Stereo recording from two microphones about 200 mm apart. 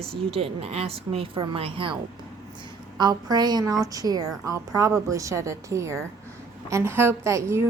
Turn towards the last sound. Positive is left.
turn(degrees=-15)  # may be behind; listen again after turning